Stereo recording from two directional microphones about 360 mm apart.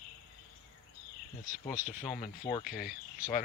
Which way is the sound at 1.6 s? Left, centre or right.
Left.